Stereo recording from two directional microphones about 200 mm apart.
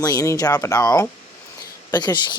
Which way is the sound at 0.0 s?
15° left (ahead or behind).